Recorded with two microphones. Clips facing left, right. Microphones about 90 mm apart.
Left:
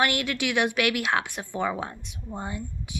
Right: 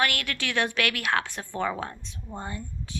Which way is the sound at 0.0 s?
20° left (ahead or behind).